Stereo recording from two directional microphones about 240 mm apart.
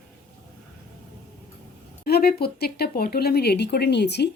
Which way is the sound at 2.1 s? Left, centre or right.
Left.